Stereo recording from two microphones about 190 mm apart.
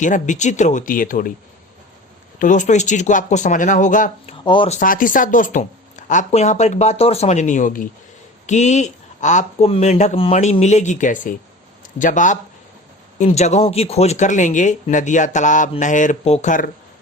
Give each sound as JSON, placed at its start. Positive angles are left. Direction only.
{"t": 0.0, "sound": "speech", "side_deg": 40}
{"t": 2.4, "sound": "speech", "side_deg": 40}
{"t": 4.4, "sound": "speech", "side_deg": 25}
{"t": 4.8, "sound": "speech", "side_deg": 45}